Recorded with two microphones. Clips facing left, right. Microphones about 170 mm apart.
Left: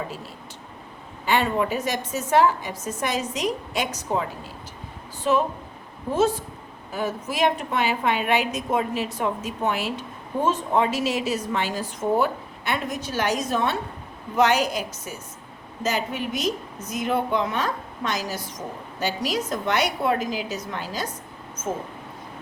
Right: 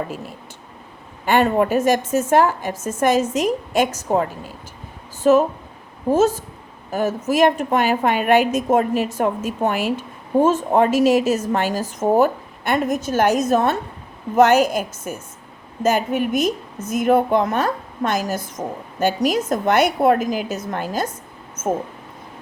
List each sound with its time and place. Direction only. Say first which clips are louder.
1.2 s a woman's voice: right 6 dB; 50° right (ahead or behind)